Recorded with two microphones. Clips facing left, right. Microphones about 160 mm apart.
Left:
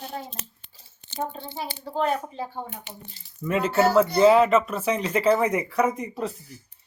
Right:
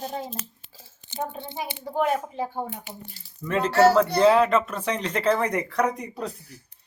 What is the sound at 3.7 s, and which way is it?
Speech, 75° right (ahead or behind).